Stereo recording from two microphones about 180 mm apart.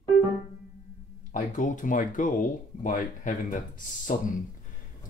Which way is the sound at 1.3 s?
45° left (ahead or behind).